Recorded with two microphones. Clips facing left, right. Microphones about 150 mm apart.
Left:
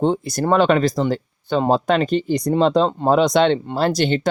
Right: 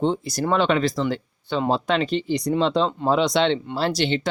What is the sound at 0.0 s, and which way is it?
Speech, 50° left (ahead or behind).